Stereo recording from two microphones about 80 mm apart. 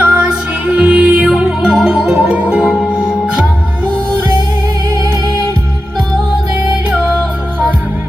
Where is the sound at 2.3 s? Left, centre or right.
Centre.